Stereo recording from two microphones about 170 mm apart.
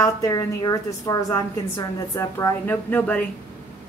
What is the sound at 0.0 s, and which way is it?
A woman's voice, 20° left (ahead or behind).